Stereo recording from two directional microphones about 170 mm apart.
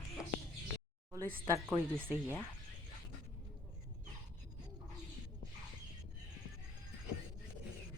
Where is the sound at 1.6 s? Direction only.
10° right (ahead or behind).